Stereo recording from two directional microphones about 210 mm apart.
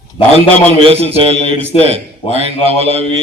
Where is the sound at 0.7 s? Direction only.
30° right (ahead or behind).